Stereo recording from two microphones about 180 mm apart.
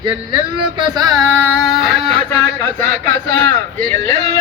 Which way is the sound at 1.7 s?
Centre (ahead or behind).